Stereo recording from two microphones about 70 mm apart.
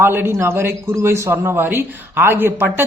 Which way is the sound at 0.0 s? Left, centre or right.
Right.